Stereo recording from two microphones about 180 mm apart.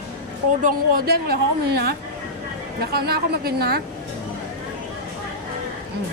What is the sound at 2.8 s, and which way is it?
A woman's voice, 60° right (ahead or behind).